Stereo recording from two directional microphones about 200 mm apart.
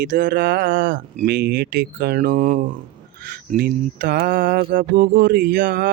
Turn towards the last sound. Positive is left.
turn(degrees=-50)  # may be behind; listen again after turning